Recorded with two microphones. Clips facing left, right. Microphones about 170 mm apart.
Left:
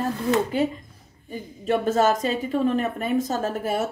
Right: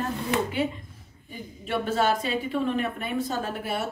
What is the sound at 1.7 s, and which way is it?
A woman's voice, 45° left (ahead or behind).